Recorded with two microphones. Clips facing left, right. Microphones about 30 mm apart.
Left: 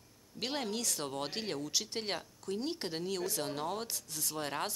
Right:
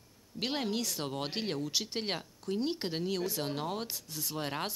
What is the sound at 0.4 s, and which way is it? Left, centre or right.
Speech, centre.